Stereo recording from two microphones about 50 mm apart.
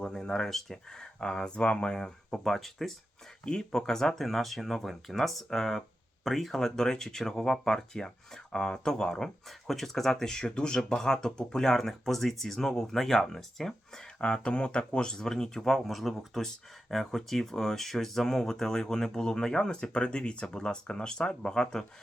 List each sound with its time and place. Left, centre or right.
0.0 s speech: centre